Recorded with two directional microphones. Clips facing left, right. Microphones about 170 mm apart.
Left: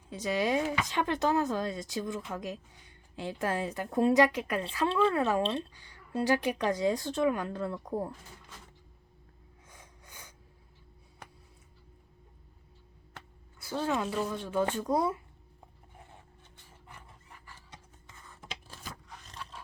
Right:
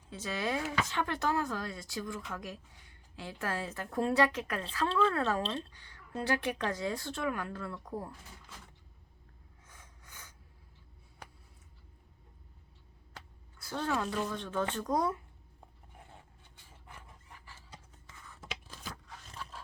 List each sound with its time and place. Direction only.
0.1 s speech: 15° left (ahead or behind)
9.6 s a sound: 15° left (ahead or behind)
13.7 s speech: 10° left (ahead or behind)
18.9 s scissors: centre (ahead or behind)